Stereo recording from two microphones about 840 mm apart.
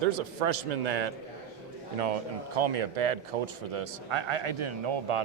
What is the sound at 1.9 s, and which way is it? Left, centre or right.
A man's voice, right.